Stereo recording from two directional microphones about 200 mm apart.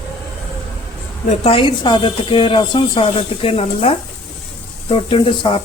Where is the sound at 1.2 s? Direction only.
30° left (ahead or behind).